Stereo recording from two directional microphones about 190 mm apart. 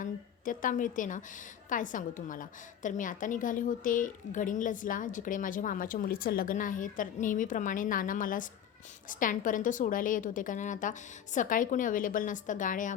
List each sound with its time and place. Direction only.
0.0 s a woman's voice: 45° left (ahead or behind)